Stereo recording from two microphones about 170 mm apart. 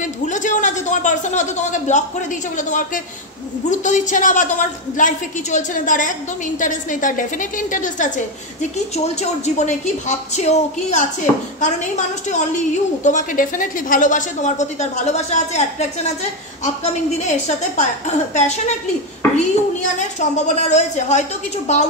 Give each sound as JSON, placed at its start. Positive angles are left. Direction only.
{"t": 0.0, "sound": "a woman's voice", "side_deg": 45}